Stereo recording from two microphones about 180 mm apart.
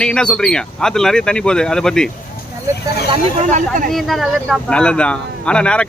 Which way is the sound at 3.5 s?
45° right (ahead or behind).